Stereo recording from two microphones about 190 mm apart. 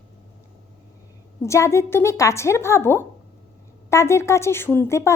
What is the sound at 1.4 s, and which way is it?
A woman's voice, 15° left (ahead or behind).